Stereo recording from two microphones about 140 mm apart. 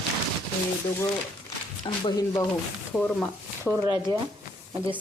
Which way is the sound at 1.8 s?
35° left (ahead or behind).